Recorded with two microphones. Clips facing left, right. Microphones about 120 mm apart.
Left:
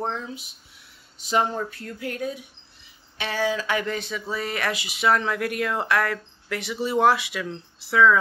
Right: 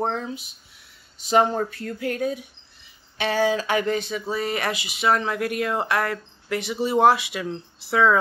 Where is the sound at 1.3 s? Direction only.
35° right (ahead or behind).